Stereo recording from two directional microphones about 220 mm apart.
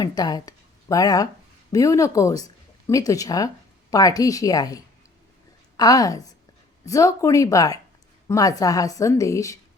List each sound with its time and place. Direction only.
0.0 s a woman's voice: 20° left (ahead or behind)